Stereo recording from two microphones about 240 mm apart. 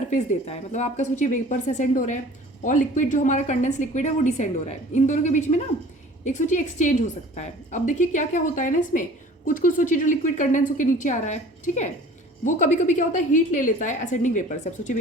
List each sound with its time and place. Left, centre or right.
0.1 s a woman's voice: left